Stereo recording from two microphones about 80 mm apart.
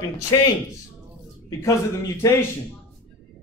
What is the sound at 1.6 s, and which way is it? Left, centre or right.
Speech, left.